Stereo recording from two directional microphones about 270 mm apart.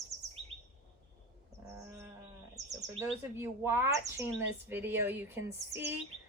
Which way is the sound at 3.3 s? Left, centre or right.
Centre.